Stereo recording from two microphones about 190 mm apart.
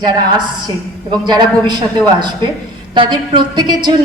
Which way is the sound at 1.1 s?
20° right (ahead or behind).